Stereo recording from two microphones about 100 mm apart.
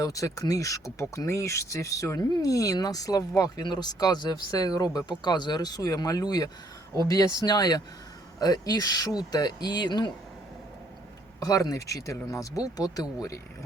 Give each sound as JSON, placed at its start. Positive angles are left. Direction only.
{"t": 0.0, "sound": "speech", "side_deg": 35}
{"t": 11.3, "sound": "speech", "side_deg": 35}